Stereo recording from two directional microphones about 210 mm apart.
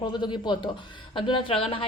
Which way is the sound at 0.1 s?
20° left (ahead or behind).